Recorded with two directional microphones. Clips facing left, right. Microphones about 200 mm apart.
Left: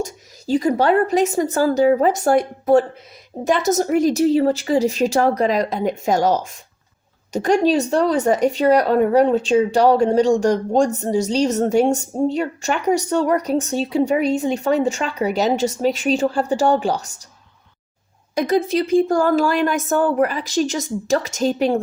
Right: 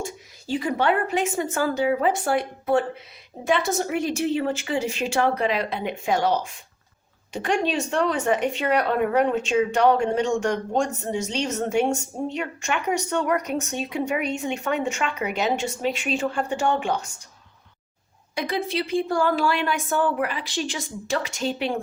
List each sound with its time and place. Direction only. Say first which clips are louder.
0.0 s speech: left 6 dB; 40° left (ahead or behind)
18.3 s a woman's voice: left 8 dB; 45° left (ahead or behind)